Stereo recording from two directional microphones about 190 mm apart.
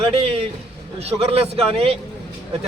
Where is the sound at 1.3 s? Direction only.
30° right (ahead or behind).